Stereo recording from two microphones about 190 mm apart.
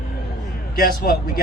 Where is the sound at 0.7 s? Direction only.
50° left (ahead or behind).